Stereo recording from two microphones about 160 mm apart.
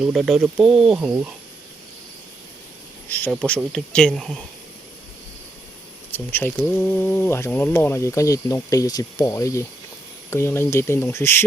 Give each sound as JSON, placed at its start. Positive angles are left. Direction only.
{"t": 0.0, "sound": "speech", "side_deg": 0}
{"t": 3.1, "sound": "speech", "side_deg": 10}
{"t": 6.1, "sound": "speech", "side_deg": 15}